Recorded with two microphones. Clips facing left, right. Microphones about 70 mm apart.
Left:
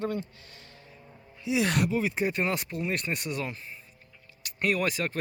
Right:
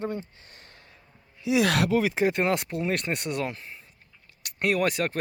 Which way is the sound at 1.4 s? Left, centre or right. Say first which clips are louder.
Right 3 dB; right.